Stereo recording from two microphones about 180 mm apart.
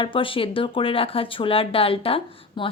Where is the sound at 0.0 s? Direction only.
30° left (ahead or behind).